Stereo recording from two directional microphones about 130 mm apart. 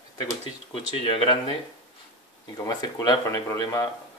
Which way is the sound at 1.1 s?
40° left (ahead or behind).